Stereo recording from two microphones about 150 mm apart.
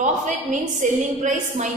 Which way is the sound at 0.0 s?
55° right (ahead or behind).